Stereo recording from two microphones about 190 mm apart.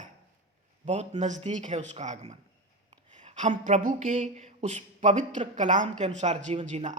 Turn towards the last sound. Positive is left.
turn(degrees=-40)  # may be behind; listen again after turning